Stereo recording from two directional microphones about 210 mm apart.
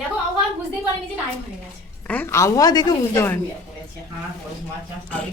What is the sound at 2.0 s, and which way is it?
Speech, 10° left (ahead or behind).